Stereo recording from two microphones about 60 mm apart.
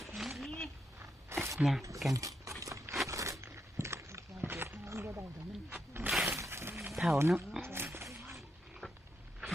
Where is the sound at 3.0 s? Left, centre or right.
Right.